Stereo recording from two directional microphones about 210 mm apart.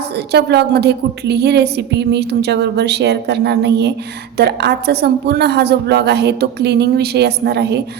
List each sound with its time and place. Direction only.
0.3 s a woman's voice: 50° right (ahead or behind)